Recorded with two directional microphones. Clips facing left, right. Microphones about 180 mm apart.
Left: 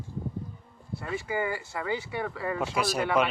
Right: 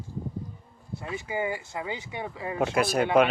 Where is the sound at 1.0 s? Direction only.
20° right (ahead or behind).